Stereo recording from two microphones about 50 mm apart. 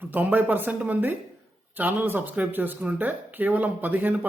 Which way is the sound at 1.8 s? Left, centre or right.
Right.